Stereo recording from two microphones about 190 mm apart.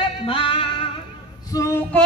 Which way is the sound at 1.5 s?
20° left (ahead or behind).